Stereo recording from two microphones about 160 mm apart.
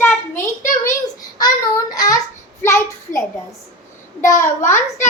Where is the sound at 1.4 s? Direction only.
25° left (ahead or behind).